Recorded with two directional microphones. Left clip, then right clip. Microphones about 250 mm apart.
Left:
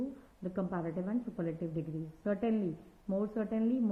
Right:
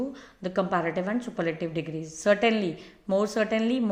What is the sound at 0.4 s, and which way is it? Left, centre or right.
A woman's voice, centre.